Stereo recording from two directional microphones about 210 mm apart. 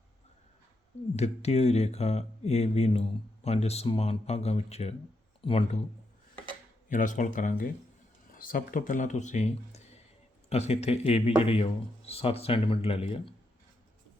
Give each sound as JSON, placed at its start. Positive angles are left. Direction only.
{"t": 1.1, "sound": "speech", "side_deg": 30}
{"t": 6.8, "sound": "speech", "side_deg": 35}